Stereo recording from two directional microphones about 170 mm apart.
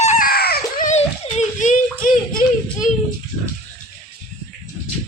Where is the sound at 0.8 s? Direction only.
40° left (ahead or behind).